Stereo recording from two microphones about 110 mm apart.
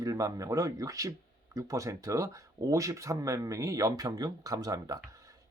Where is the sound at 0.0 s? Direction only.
30° right (ahead or behind).